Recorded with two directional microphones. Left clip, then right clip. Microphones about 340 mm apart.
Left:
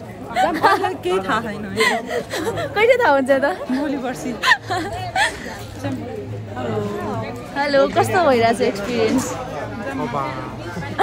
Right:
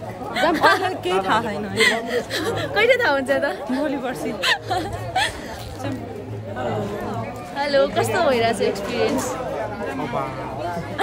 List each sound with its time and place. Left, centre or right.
0.6 s speech: centre
0.8 s a woman's voice: centre
1.8 s a woman's voice: centre
3.8 s a woman's voice: centre
4.4 s speech: centre
7.5 s a woman's voice: centre